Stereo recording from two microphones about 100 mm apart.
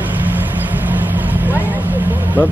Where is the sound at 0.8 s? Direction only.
15° right (ahead or behind).